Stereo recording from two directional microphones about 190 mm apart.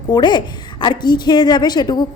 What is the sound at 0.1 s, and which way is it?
A woman's voice, 25° left (ahead or behind).